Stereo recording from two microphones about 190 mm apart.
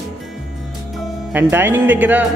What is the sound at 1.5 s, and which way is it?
Speech, 10° right (ahead or behind).